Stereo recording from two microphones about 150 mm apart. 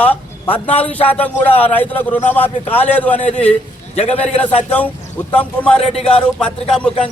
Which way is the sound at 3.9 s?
40° left (ahead or behind).